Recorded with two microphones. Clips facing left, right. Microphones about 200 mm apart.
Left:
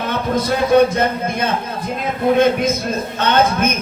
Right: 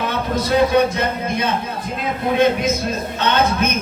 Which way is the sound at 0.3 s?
50° left (ahead or behind).